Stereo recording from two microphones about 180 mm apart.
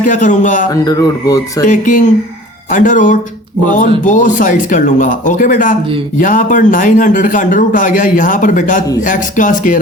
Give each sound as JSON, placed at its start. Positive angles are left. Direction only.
{"t": 0.0, "sound": "speech", "side_deg": 45}
{"t": 0.9, "sound": "speech", "side_deg": 20}
{"t": 1.6, "sound": "speech", "side_deg": 45}